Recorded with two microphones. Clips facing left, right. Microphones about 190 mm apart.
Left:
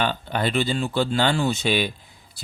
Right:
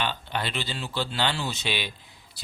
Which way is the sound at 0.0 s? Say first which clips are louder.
Left 6 dB; 45° left (ahead or behind).